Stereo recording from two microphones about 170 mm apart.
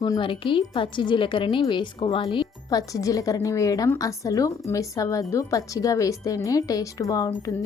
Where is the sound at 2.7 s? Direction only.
20° left (ahead or behind).